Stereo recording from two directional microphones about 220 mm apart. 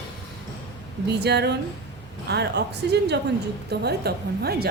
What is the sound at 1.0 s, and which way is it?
A woman's voice, 50° right (ahead or behind).